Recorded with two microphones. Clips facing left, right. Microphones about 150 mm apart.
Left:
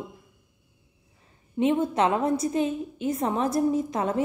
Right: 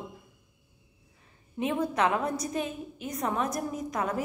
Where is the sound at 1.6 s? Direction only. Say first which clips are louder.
Left 5 dB; 25° left (ahead or behind).